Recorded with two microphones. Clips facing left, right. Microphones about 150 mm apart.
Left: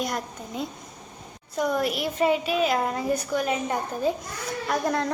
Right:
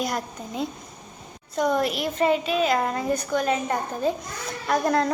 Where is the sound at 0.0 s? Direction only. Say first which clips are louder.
Right 2 dB; centre (ahead or behind).